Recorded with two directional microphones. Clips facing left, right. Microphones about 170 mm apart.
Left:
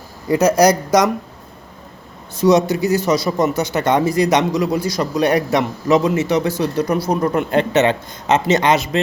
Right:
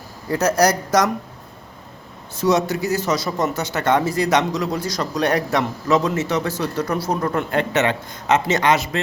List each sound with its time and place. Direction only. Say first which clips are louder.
0.3 s speech: left 5 dB; 15° left (ahead or behind)
2.3 s speech: left 5 dB; 15° left (ahead or behind)